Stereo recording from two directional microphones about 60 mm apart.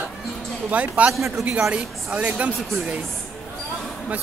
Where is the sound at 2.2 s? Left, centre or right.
Right.